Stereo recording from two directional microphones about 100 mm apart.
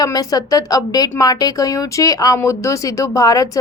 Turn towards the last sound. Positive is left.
turn(degrees=35)  # may be behind; listen again after turning